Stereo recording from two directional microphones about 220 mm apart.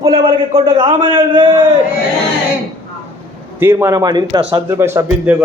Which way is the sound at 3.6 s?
10° right (ahead or behind).